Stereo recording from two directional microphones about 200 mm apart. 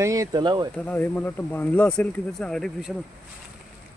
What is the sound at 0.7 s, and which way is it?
Speech, 10° left (ahead or behind).